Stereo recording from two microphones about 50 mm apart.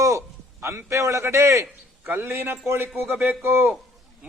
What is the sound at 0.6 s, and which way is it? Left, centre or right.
A man's voice, right.